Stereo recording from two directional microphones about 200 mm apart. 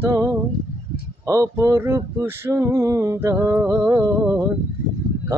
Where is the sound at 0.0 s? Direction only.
10° right (ahead or behind).